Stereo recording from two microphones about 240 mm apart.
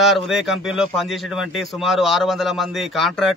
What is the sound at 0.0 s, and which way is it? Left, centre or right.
A man's voice, centre.